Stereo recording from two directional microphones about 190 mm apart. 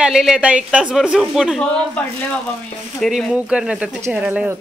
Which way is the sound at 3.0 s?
Centre (ahead or behind).